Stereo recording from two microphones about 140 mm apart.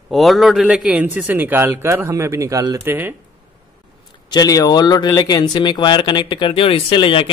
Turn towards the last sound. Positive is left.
turn(degrees=40)  # may be behind; listen again after turning